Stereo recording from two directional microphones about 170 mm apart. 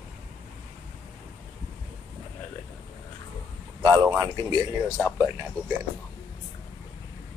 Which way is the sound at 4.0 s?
25° right (ahead or behind).